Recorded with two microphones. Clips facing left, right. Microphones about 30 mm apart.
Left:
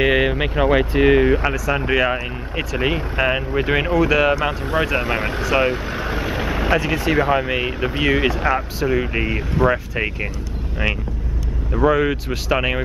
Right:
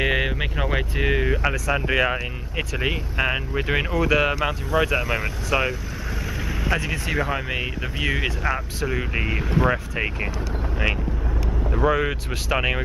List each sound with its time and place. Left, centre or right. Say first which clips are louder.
0.0 s speech: left 6 dB; centre
4.7 s speech: left 1 dB; left
5.4 s speech: left 5 dB; centre
5.7 s vehicle: left 7 dB; left
6.7 s speech: left 6 dB; centre
11.7 s speech: left 5 dB; centre